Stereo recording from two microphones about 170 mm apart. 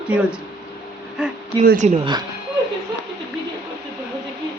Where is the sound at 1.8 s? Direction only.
40° right (ahead or behind).